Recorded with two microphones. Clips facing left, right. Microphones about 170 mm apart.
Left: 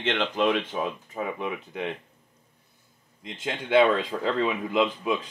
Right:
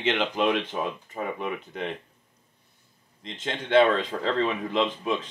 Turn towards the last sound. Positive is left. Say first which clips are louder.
# left 1 dB
turn(degrees=5)  # may be behind; listen again after turning